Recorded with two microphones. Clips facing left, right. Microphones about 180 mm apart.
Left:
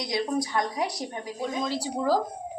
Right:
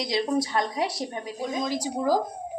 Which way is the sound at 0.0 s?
25° right (ahead or behind).